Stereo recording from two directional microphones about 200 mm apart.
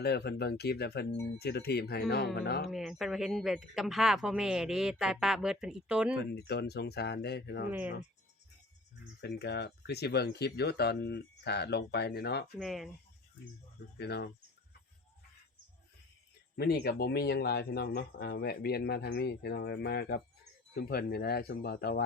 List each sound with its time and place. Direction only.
0.0 s speech: 55° left (ahead or behind)
2.6 s speech: centre (ahead or behind)
6.3 s speech: 55° left (ahead or behind)
7.7 s speech: 10° right (ahead or behind)
9.2 s speech: 55° left (ahead or behind)
12.5 s speech: centre (ahead or behind)
14.0 s speech: 55° left (ahead or behind)
16.6 s speech: 55° left (ahead or behind)